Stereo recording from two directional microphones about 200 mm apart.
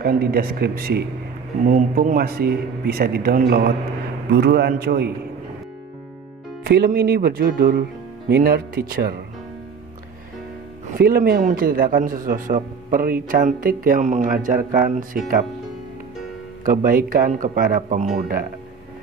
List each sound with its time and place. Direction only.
0.0 s a man's voice: 50° right (ahead or behind)
6.6 s a man's voice: 50° right (ahead or behind)
11.0 s a man's voice: 50° right (ahead or behind)
16.6 s a man's voice: 45° right (ahead or behind)